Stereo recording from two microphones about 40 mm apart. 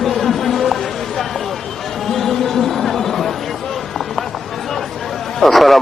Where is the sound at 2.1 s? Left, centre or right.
Centre.